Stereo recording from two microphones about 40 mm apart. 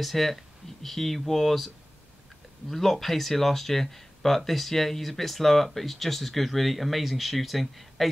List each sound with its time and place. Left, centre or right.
0.0 s speech: centre
2.7 s speech: centre